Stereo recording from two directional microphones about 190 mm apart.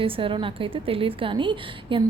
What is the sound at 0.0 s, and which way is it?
A woman's voice, 30° right (ahead or behind).